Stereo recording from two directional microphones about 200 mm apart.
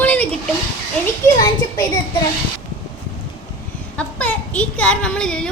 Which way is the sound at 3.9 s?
5° left (ahead or behind).